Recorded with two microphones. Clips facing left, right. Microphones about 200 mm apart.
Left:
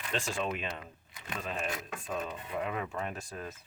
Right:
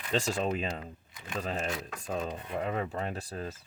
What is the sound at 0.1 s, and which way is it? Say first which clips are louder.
Speech: right 5 dB; 40° right (ahead or behind).